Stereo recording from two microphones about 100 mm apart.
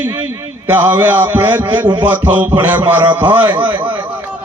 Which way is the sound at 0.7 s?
20° right (ahead or behind).